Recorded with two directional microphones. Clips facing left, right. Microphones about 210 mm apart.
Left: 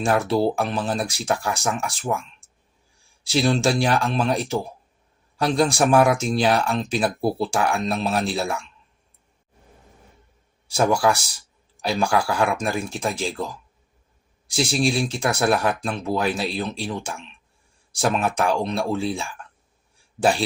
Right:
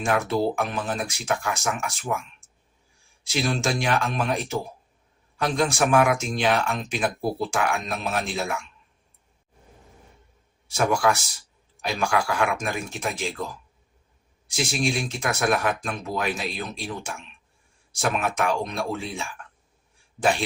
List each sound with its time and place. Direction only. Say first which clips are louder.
0.0 s speech: left 3 dB; 35° left (ahead or behind)
3.2 s speech: left 5 dB; 30° left (ahead or behind)
10.7 s speech: left 3 dB; 30° left (ahead or behind)
14.4 s speech: left 4 dB; 35° left (ahead or behind)